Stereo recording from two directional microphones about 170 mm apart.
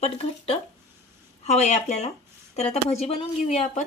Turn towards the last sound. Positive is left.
turn(degrees=40)  # may be behind; listen again after turning